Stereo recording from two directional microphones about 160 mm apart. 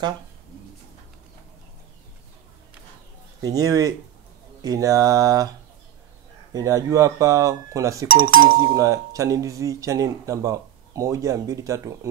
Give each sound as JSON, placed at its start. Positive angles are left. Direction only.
{"t": 3.4, "sound": "speech", "side_deg": -20}
{"t": 6.5, "sound": "speech", "side_deg": -20}